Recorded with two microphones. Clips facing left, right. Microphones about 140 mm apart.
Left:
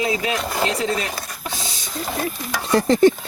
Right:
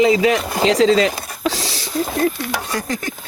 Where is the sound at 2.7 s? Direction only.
30° left (ahead or behind).